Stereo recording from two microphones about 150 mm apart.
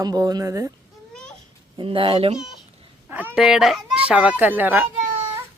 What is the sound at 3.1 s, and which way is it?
Speech, 10° right (ahead or behind).